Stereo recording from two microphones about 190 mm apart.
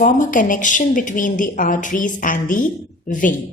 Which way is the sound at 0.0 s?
45° left (ahead or behind).